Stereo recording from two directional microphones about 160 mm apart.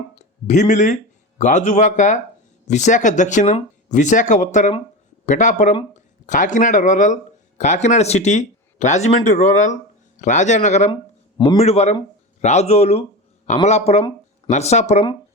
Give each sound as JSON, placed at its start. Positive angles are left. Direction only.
{"t": 0.2, "sound": "speech", "side_deg": 45}